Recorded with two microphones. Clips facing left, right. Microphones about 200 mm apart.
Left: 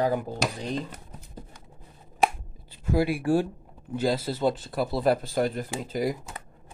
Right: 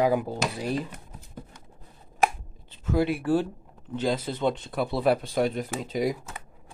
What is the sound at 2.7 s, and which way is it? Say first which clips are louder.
Speech: even; 10° left (ahead or behind).